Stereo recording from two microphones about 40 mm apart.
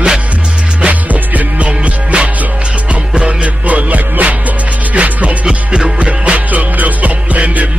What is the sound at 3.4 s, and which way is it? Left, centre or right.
Music, right.